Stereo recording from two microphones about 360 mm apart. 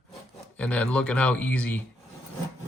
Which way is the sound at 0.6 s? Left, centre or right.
Centre.